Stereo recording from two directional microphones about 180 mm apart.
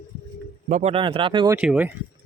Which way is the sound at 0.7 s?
40° right (ahead or behind).